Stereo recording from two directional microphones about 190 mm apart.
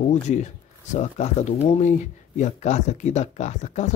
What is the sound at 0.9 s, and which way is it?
Speech, 35° left (ahead or behind).